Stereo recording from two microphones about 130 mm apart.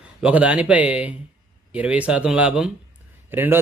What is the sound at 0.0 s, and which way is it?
A man's voice, 10° right (ahead or behind).